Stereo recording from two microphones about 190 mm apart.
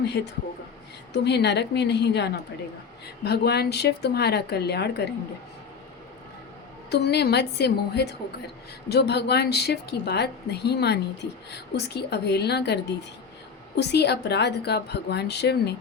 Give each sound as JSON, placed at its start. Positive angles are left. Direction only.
{"t": 0.2, "sound": "a woman's voice", "side_deg": 65}
{"t": 6.9, "sound": "a woman's voice", "side_deg": 60}